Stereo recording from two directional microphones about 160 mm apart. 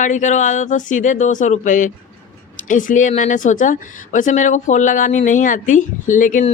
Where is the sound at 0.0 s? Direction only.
50° left (ahead or behind).